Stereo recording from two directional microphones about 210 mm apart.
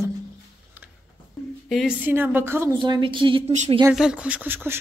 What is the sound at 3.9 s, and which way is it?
Speech, 5° right (ahead or behind).